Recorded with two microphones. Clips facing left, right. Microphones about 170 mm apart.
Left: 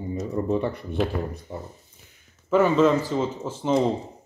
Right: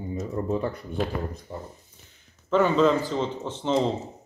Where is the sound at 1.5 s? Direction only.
15° left (ahead or behind).